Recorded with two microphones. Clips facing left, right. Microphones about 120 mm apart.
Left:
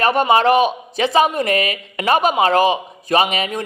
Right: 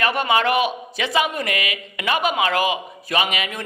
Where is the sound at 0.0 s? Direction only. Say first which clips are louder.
Left 5 dB; 35° left (ahead or behind).